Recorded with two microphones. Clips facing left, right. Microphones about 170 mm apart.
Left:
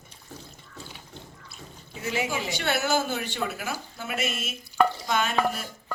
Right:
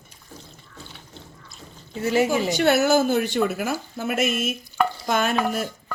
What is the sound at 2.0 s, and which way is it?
Speech, 40° right (ahead or behind).